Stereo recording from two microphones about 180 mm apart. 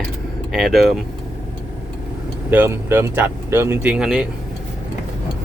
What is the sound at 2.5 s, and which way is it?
Speech, 15° right (ahead or behind).